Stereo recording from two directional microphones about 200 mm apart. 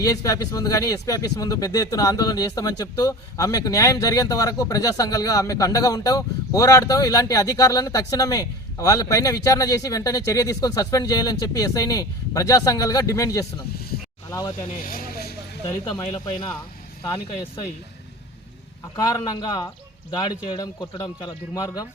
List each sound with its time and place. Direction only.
0.0 s speech: 15° left (ahead or behind)
14.8 s a sound: 45° left (ahead or behind)
16.1 s speech: 25° left (ahead or behind)
18.9 s speech: 20° left (ahead or behind)